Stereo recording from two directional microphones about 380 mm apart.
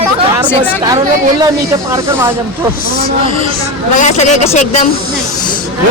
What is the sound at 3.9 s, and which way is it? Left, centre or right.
Speech, centre.